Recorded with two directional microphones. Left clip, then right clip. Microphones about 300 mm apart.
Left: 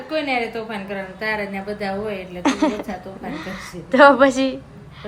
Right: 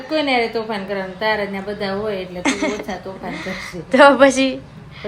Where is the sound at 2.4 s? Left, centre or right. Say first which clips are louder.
Left 2 dB; centre.